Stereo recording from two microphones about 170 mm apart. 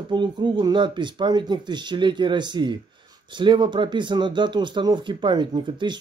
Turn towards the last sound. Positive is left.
turn(degrees=-25)  # may be behind; listen again after turning